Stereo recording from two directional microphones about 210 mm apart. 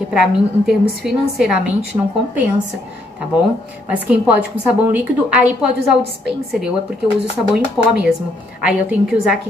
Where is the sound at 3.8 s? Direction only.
5° right (ahead or behind).